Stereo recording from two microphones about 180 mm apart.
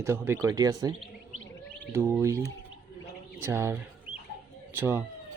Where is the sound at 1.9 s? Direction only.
15° right (ahead or behind).